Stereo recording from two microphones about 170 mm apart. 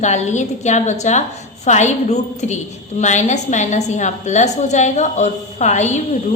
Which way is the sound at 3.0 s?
45° left (ahead or behind).